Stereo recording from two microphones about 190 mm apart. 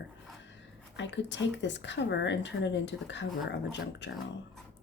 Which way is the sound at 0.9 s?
70° left (ahead or behind).